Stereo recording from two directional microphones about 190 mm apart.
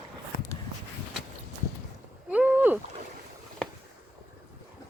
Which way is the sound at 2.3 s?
10° right (ahead or behind).